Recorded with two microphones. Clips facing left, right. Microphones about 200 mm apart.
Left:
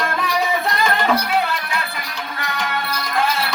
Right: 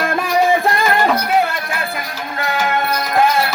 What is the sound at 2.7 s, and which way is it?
Music, 50° right (ahead or behind).